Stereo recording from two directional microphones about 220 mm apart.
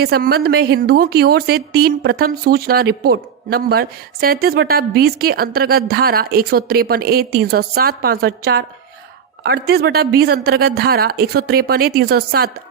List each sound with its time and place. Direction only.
0.0 s a woman's voice: 45° right (ahead or behind)
9.6 s a woman's voice: 45° right (ahead or behind)